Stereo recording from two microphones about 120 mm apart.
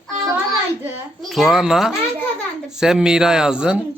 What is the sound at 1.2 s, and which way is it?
A child's voice, centre (ahead or behind).